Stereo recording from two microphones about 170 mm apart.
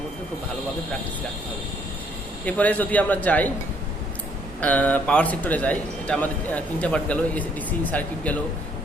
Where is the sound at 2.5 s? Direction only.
10° left (ahead or behind).